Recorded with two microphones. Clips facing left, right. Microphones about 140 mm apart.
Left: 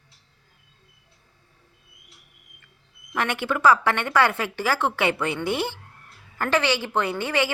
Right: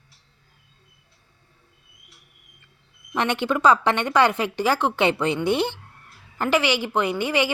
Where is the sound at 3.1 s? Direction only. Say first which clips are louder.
Right 3 dB; 20° right (ahead or behind).